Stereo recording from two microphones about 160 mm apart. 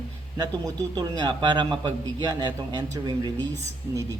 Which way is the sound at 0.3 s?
25° right (ahead or behind).